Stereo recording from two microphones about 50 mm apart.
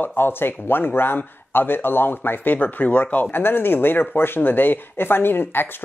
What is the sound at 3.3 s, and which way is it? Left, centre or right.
Speech, left.